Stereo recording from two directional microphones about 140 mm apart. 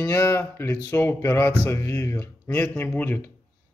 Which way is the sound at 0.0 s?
20° left (ahead or behind).